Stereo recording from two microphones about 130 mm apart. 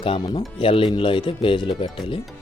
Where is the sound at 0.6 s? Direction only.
45° left (ahead or behind).